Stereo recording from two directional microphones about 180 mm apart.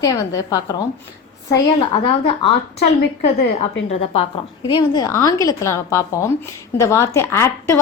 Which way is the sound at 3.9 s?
30° left (ahead or behind).